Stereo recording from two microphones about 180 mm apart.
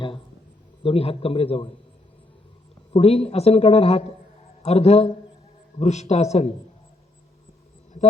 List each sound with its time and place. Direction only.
0.8 s speech: 30° left (ahead or behind)
2.9 s speech: 35° left (ahead or behind)